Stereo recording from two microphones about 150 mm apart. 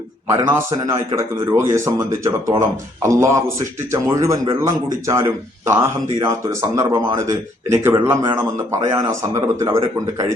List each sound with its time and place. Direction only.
0.3 s a man's voice: 15° right (ahead or behind)